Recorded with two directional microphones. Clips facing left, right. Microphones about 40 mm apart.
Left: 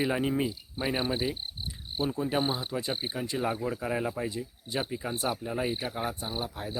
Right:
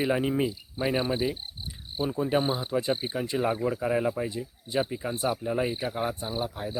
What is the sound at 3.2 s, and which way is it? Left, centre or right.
Speech, centre.